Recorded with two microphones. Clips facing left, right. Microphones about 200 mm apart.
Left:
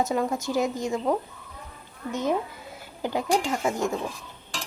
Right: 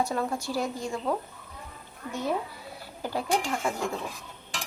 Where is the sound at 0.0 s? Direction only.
20° left (ahead or behind).